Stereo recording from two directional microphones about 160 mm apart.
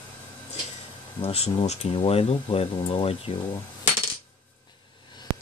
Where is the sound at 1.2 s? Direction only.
40° left (ahead or behind).